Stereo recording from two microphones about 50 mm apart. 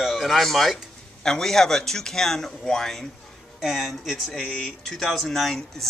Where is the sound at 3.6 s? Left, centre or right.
Centre.